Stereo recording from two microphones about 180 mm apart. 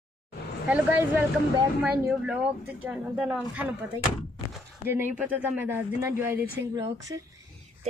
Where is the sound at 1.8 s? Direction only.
5° right (ahead or behind).